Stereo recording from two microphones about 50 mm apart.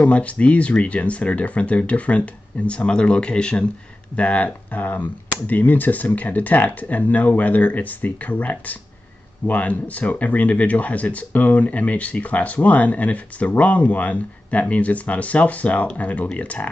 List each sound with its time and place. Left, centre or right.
0.0 s speech: left